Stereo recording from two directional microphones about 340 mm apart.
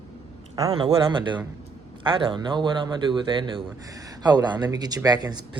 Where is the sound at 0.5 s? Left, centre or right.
Centre.